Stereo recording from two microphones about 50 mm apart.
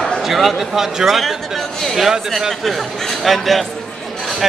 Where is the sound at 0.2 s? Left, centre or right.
Centre.